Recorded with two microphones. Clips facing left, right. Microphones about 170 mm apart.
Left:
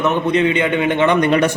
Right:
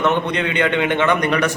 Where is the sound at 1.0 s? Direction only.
25° left (ahead or behind).